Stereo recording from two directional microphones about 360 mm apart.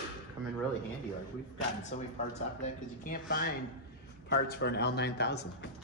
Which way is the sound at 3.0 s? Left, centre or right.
Left.